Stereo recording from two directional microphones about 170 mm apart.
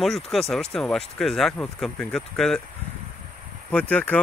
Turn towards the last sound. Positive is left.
turn(degrees=10)  # may be behind; listen again after turning